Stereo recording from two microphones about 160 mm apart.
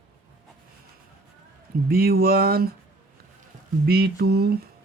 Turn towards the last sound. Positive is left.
turn(degrees=-80)